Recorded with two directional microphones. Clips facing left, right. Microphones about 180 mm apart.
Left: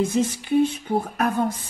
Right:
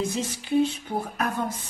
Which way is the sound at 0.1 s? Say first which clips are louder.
Left 4 dB; 55° left (ahead or behind).